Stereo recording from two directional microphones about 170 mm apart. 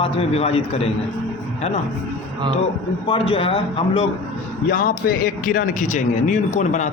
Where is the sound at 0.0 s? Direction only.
35° left (ahead or behind).